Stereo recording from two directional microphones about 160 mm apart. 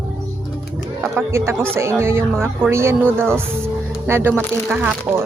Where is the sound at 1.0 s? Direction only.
5° right (ahead or behind).